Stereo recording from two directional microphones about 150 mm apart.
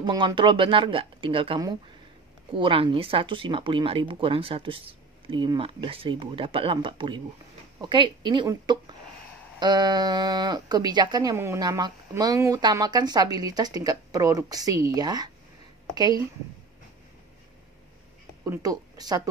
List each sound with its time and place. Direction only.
0.0 s speech: 30° right (ahead or behind)
18.4 s speech: 20° right (ahead or behind)